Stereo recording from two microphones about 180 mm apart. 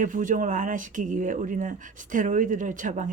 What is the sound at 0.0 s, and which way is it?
Speech, 45° right (ahead or behind).